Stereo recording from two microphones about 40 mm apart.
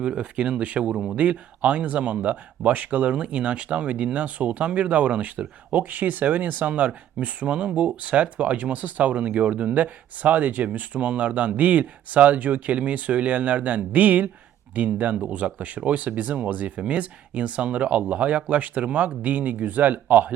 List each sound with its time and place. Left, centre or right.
0.0 s speech: right